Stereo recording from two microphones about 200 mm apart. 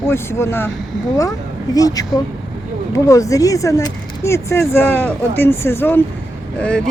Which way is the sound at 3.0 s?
15° left (ahead or behind).